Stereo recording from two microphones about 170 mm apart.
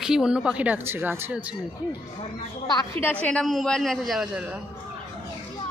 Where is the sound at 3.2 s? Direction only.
5° left (ahead or behind).